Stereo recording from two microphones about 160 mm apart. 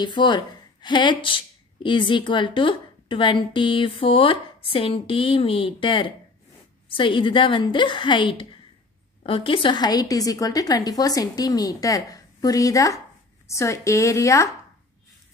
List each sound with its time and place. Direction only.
0.0 s a woman's voice: 30° left (ahead or behind)